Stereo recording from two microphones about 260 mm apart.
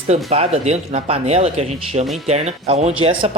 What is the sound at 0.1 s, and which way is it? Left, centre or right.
Speech, right.